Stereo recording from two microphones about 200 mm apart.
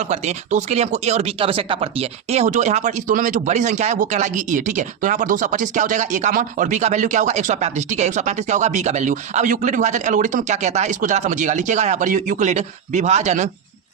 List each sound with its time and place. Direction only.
0.0 s speech: 35° right (ahead or behind)